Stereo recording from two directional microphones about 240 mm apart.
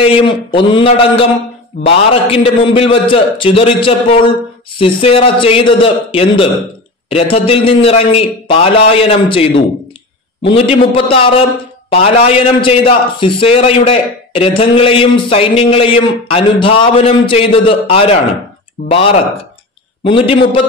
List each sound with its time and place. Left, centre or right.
0.0 s a man's voice: left